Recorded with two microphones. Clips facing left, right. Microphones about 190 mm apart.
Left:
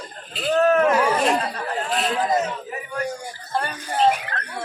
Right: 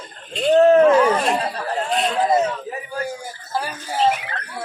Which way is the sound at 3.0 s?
5° right (ahead or behind).